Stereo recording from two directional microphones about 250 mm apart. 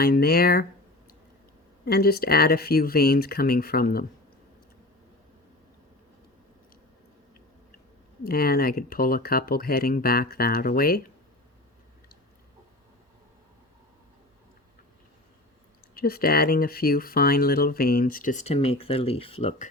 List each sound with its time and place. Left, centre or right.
0.0 s speech: left
1.8 s speech: left
8.2 s speech: left
16.0 s speech: left